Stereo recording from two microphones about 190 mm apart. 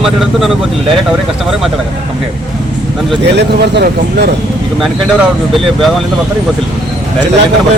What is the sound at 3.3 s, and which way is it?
Speech, 60° right (ahead or behind).